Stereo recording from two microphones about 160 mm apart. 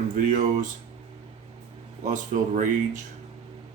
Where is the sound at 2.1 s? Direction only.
50° right (ahead or behind).